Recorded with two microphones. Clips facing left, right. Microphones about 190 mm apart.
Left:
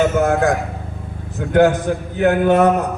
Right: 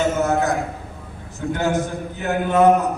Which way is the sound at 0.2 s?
55° left (ahead or behind).